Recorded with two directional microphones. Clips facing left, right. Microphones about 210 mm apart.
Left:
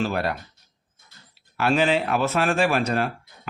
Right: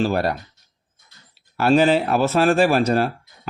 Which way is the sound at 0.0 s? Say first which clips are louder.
Right 4 dB; 40° right (ahead or behind).